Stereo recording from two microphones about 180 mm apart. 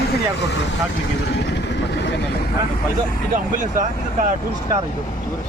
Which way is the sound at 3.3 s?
45° right (ahead or behind).